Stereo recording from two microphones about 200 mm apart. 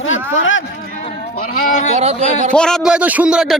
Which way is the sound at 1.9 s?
35° right (ahead or behind).